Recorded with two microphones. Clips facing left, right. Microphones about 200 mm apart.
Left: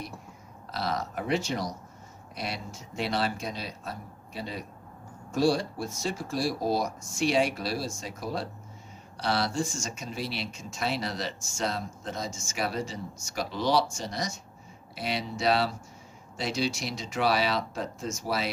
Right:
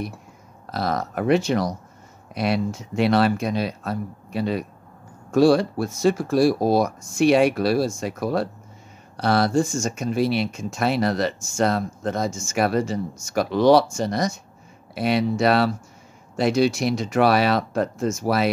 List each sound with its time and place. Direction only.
0.7 s speech: 50° right (ahead or behind)